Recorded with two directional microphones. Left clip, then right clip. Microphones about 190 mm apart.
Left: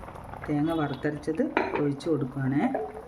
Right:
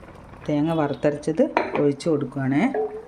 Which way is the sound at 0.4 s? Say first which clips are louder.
Right 5 dB; 25° right (ahead or behind).